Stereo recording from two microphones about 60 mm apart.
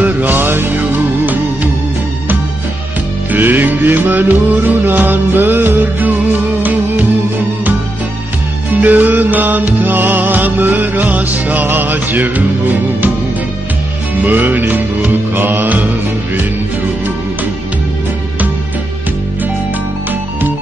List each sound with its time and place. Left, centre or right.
0.0 s music: right
3.3 s music: right
8.8 s music: right
14.2 s music: right